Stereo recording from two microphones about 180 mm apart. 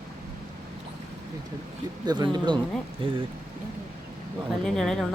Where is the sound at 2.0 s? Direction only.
25° right (ahead or behind).